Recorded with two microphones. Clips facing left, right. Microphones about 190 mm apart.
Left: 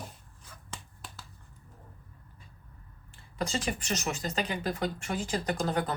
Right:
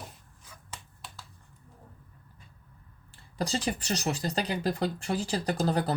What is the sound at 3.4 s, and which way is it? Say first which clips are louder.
Speech: right 2 dB; 35° right (ahead or behind).